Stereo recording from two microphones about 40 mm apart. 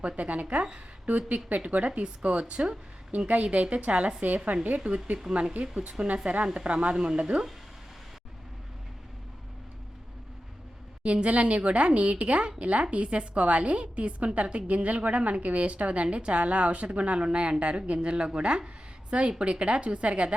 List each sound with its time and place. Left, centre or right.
0.2 s a woman's voice: right
1.0 s a woman's voice: right
5.7 s a woman's voice: right
6.9 s speech: centre
7.2 s speech: right
11.0 s a woman's voice: right